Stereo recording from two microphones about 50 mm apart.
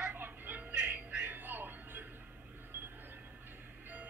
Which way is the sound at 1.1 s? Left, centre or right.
Right.